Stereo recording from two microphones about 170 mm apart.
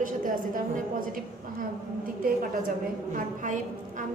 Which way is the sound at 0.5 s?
55° right (ahead or behind).